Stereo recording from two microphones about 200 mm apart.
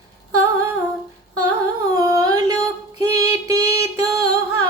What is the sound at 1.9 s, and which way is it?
Carnatic music, 15° right (ahead or behind).